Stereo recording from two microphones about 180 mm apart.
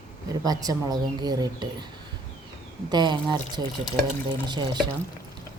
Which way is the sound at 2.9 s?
25° right (ahead or behind).